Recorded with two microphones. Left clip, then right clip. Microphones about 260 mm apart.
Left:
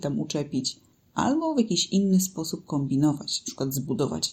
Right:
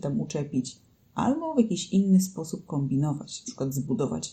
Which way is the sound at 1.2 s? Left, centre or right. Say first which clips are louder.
Left 1 dB; left.